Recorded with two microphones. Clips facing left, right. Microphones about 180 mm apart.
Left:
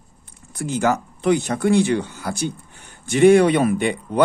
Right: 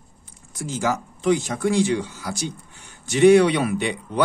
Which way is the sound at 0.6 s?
60° left (ahead or behind).